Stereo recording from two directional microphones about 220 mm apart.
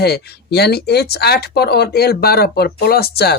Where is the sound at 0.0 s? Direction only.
45° left (ahead or behind).